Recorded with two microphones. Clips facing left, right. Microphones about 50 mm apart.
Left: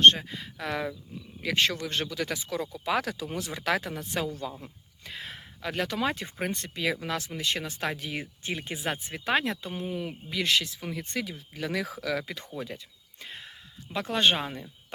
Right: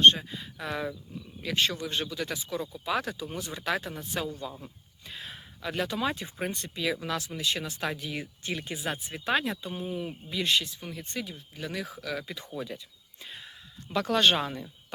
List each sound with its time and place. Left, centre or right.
0.0 s speech: left
1.4 s speech: left
3.9 s a woman's voice: left
8.4 s speech: left
9.8 s speech: left
10.1 s speech: left
11.5 s speech: left
12.1 s a woman's voice: left
13.2 s a sound: left
13.9 s speech: left